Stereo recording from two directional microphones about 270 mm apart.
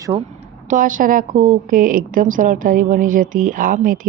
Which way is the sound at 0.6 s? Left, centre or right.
Right.